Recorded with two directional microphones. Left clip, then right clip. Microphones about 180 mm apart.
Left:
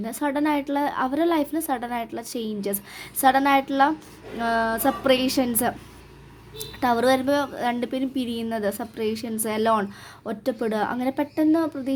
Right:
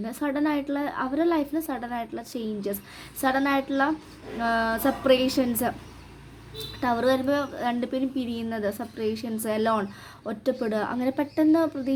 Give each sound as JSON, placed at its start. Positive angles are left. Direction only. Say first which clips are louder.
{"t": 0.0, "sound": "a woman's voice", "louder": "left 3 dB", "side_deg": 15}
{"t": 6.7, "sound": "a woman's voice", "louder": "left 3 dB", "side_deg": 20}